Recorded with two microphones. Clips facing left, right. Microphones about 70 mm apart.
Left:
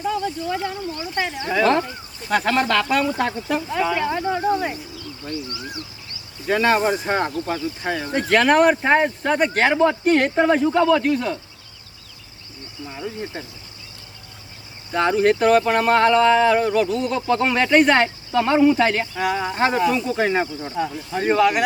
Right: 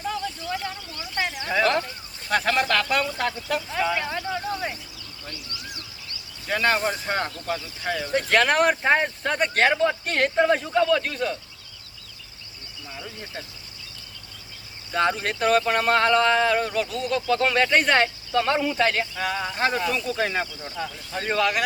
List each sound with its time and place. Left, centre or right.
0.0 s a sound: centre
0.3 s speech: left
1.5 s speech: centre
3.2 s speech: left
3.7 s speech: centre
4.2 s speech: left
6.5 s speech: centre
8.1 s speech: centre
12.9 s speech: left
14.9 s speech: centre